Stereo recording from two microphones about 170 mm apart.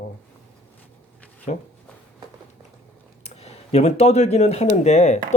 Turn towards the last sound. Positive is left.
turn(degrees=40)  # may be behind; listen again after turning